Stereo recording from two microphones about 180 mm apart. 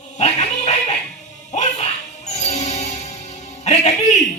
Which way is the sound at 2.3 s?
40° left (ahead or behind).